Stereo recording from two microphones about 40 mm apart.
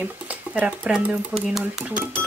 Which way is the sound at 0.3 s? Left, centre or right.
Right.